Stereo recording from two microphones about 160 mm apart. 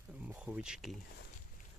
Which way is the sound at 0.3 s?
10° right (ahead or behind).